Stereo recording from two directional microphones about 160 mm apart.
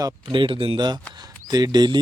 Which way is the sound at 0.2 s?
30° right (ahead or behind).